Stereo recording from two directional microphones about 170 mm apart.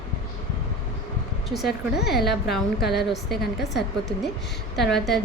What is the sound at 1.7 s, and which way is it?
A woman's voice, 70° left (ahead or behind).